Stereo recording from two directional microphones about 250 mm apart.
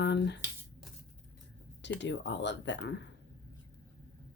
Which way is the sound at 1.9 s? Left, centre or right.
Left.